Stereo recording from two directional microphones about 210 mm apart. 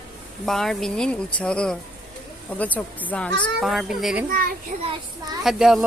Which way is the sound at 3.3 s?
55° right (ahead or behind).